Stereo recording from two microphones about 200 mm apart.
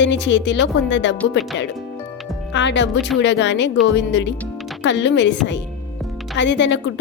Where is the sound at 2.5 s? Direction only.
60° left (ahead or behind).